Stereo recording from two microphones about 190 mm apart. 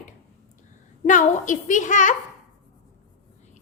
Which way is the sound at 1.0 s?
40° left (ahead or behind).